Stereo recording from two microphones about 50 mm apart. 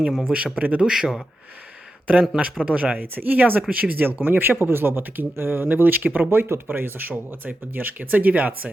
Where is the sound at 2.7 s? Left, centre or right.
Right.